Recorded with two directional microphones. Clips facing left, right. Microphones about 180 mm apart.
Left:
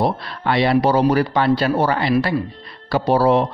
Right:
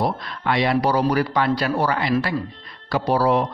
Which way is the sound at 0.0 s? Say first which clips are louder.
Left 3 dB; 35° left (ahead or behind).